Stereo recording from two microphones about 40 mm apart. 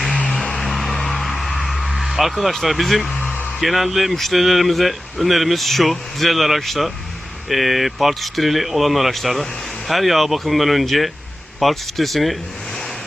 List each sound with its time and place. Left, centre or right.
0.3 s music: centre
1.5 s a sound: centre
2.0 s car: centre
2.4 s speech: centre